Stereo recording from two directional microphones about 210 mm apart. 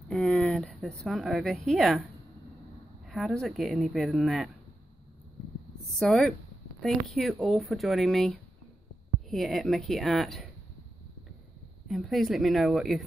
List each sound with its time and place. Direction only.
0.1 s speech: 5° left (ahead or behind)
3.1 s speech: centre (ahead or behind)
5.9 s speech: 5° left (ahead or behind)
11.9 s speech: centre (ahead or behind)